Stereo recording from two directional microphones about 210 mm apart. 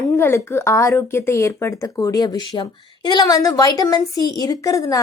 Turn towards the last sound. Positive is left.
turn(degrees=15)  # may be behind; listen again after turning